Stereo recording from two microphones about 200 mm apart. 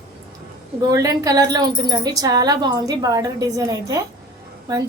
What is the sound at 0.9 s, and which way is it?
A woman's voice, 15° right (ahead or behind).